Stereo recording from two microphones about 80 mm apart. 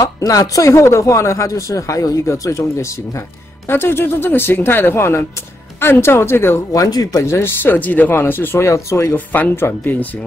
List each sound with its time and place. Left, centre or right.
0.0 s speech: left
3.6 s speech: left
6.7 s speech: left
7.2 s speech: left
9.1 s speech: left